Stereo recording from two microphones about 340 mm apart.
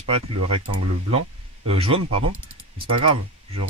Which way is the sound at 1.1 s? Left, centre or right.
Centre.